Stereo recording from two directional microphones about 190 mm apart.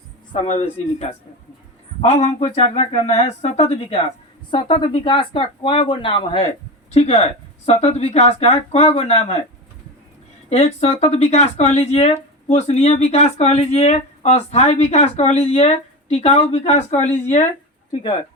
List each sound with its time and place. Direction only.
0.3 s speech: 35° left (ahead or behind)
10.5 s speech: 35° left (ahead or behind)